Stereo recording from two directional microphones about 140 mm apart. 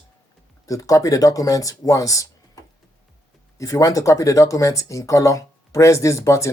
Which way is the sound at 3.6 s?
25° left (ahead or behind).